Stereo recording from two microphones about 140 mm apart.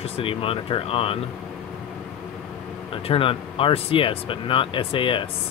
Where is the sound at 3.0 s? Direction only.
40° left (ahead or behind).